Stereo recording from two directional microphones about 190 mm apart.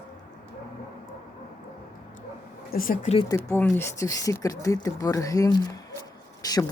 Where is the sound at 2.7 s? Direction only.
45° left (ahead or behind).